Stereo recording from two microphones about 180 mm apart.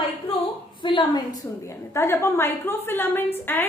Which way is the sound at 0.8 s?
25° left (ahead or behind).